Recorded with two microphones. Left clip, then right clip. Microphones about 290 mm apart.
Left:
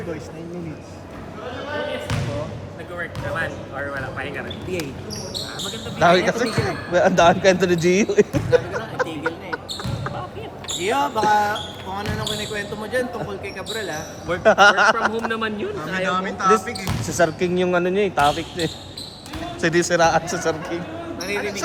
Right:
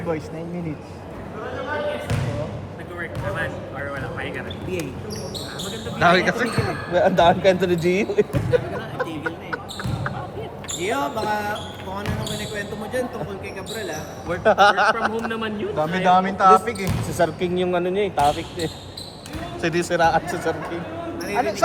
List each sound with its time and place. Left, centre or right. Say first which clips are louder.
3.0 s speech: left 1 dB; left
6.0 s speech: left 1 dB; centre
6.7 s speech: left 1 dB; left
10.8 s a man's voice: left 5 dB; left
14.3 s a man's voice: left 2 dB; left
16.0 s speech: right 5 dB; centre
17.1 s a man's voice: left 3 dB; left